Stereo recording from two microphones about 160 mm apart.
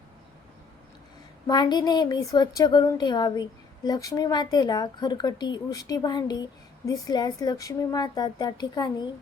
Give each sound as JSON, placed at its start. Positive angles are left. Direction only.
{"t": 1.5, "sound": "speech", "side_deg": 25}